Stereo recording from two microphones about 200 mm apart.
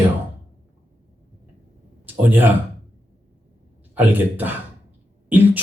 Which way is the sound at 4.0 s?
10° right (ahead or behind).